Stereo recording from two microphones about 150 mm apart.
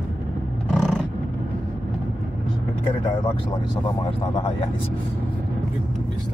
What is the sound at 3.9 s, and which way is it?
Speech, 35° left (ahead or behind).